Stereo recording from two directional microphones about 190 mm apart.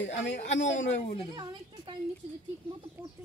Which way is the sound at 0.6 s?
40° left (ahead or behind).